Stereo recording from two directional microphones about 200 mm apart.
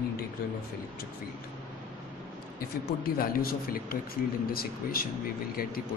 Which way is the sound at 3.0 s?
45° left (ahead or behind).